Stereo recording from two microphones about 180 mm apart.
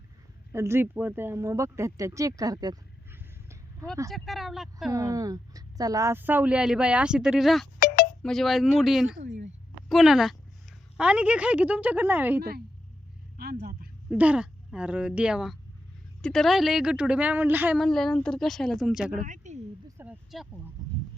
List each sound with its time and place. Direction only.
0.5 s speech: 15° right (ahead or behind)
4.1 s speech: centre (ahead or behind)
4.9 s a woman's voice: 20° right (ahead or behind); by 7.7 s centre (ahead or behind)
7.8 s a sound: 55° left (ahead or behind)
8.2 s speech: centre (ahead or behind)
9.2 s speech: 40° right (ahead or behind)
9.9 s speech: centre (ahead or behind)
12.4 s a woman's voice: 60° right (ahead or behind)
13.3 s a sound: 60° right (ahead or behind)
14.1 s speech: 5° right (ahead or behind)
17.7 s speech: centre (ahead or behind)
19.2 s speech: 40° right (ahead or behind)
20.0 s speech: 5° right (ahead or behind)
20.8 s a sound: 20° right (ahead or behind)